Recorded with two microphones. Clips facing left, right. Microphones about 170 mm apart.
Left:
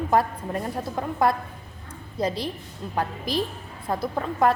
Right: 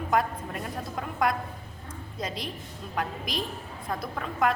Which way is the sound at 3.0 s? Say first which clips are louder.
Left 5 dB; 30° left (ahead or behind).